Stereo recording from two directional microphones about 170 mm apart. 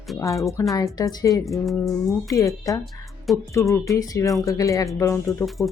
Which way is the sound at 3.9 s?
20° left (ahead or behind).